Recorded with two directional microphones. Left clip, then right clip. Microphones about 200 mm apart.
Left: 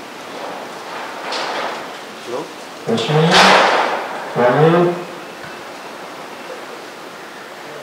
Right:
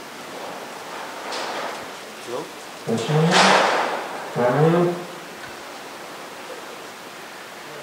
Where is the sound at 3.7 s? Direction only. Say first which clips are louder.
Left 6 dB; 15° left (ahead or behind).